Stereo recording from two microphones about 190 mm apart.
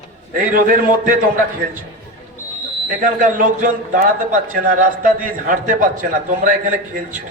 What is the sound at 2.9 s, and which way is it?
A man's voice, 45° right (ahead or behind).